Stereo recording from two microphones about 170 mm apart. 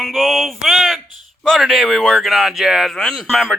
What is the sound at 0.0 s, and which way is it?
Speech, centre (ahead or behind).